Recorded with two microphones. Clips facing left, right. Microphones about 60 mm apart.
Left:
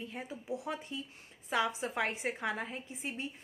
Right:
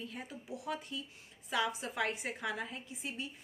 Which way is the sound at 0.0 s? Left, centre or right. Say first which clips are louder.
Left 2 dB; left.